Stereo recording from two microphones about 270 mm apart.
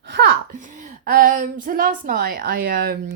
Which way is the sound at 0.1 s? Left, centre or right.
Right.